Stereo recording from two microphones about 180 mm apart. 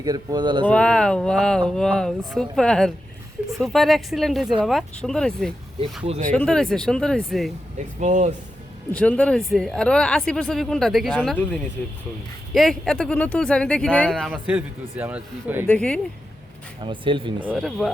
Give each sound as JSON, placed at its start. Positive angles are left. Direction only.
{"t": 0.0, "sound": "speech", "side_deg": -20}
{"t": 0.6, "sound": "speech", "side_deg": 5}
{"t": 7.9, "sound": "speech", "side_deg": -40}
{"t": 8.9, "sound": "speech", "side_deg": 10}
{"t": 14.3, "sound": "a man's voice", "side_deg": -5}
{"t": 15.6, "sound": "speech", "side_deg": 5}
{"t": 16.8, "sound": "speech", "side_deg": -30}
{"t": 17.5, "sound": "speech", "side_deg": 0}